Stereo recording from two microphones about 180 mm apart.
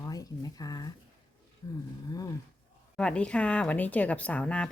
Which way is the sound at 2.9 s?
5° left (ahead or behind).